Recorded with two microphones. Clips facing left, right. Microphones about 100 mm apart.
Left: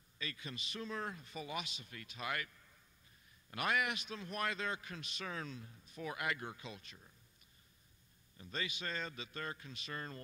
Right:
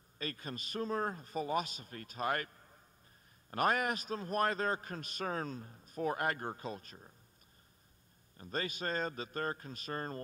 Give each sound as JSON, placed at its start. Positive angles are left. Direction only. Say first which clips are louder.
{"t": 0.2, "sound": "a man's voice", "louder": "right 5 dB", "side_deg": -45}
{"t": 8.4, "sound": "a man's voice", "louder": "right 5 dB", "side_deg": -45}